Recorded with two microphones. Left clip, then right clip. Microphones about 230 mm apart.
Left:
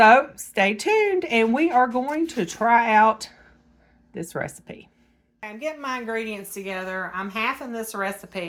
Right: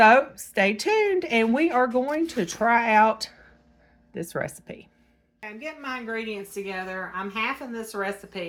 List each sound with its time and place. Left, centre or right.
0.0 s speech: centre
5.4 s a woman's voice: left